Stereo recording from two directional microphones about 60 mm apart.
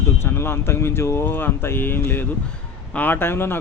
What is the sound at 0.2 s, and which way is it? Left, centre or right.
Speech, left.